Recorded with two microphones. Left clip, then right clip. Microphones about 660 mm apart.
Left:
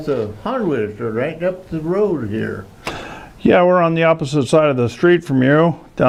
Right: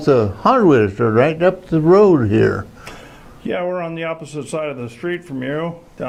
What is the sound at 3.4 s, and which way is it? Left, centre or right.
A man's voice, left.